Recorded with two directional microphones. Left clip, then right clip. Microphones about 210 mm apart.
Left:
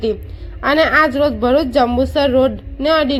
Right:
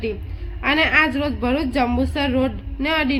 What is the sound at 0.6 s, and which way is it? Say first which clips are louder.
A woman's voice: left 4 dB; 20° left (ahead or behind).